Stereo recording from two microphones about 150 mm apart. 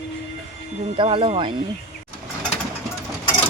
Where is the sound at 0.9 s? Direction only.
35° right (ahead or behind).